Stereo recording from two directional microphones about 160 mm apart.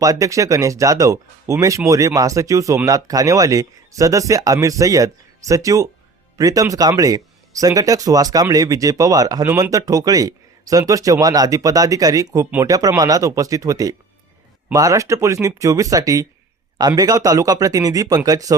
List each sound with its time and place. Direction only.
0.0 s speech: 20° right (ahead or behind)